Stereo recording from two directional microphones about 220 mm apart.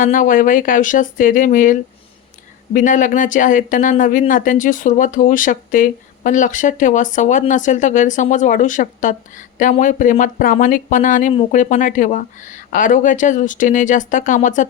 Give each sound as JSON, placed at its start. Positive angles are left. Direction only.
{"t": 0.0, "sound": "speech", "side_deg": 35}